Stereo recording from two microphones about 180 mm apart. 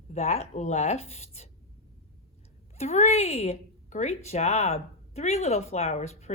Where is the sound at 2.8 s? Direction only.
35° left (ahead or behind).